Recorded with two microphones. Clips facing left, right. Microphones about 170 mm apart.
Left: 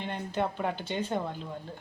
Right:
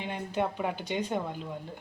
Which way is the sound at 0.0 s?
10° right (ahead or behind).